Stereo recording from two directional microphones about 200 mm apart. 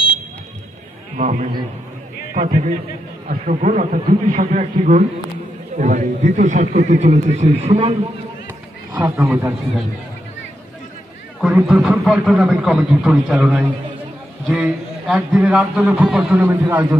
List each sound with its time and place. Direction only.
1.1 s a man's voice: 35° right (ahead or behind)
8.9 s a man's voice: 15° right (ahead or behind)
11.4 s a man's voice: centre (ahead or behind)